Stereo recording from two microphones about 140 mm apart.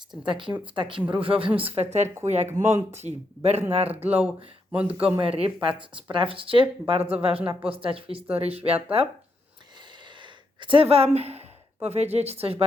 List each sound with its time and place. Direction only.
0.3 s speech: 35° right (ahead or behind)
4.1 s speech: 10° right (ahead or behind)
5.2 s speech: 40° right (ahead or behind)
10.6 s a woman's voice: 40° right (ahead or behind)